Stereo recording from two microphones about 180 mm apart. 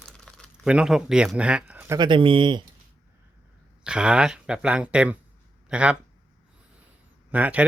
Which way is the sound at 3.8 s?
5° right (ahead or behind).